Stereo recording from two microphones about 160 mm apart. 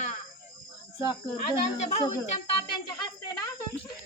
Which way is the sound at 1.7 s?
45° left (ahead or behind).